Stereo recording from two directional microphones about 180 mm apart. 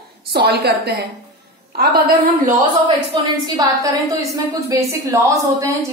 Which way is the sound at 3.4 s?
20° right (ahead or behind).